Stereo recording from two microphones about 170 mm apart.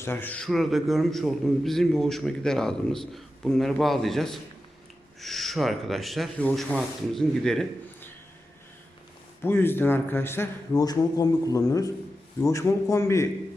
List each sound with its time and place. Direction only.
0.0 s a man's voice: 10° left (ahead or behind)
9.4 s a man's voice: 15° left (ahead or behind)